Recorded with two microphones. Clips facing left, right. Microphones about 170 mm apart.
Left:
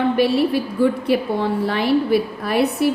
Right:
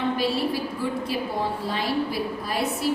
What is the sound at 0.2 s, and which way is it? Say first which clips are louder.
A woman's voice: left 8 dB; 65° left (ahead or behind).